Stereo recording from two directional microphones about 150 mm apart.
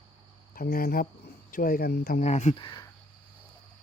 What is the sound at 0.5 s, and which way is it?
Speech, 80° left.